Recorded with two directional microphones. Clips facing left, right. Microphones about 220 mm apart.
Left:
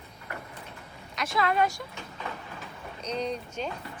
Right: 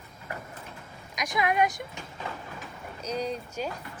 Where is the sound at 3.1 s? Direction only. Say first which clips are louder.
Even; 10° right (ahead or behind).